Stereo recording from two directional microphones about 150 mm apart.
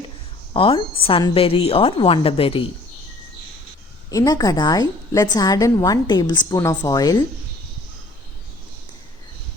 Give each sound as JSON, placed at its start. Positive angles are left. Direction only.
{"t": 0.5, "sound": "a woman's voice", "side_deg": 35}
{"t": 4.1, "sound": "a woman's voice", "side_deg": 25}